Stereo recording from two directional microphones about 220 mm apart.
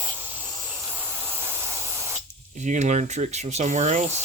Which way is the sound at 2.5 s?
35° right (ahead or behind).